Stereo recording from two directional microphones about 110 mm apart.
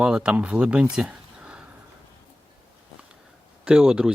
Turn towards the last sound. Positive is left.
turn(degrees=-5)  # may be behind; listen again after turning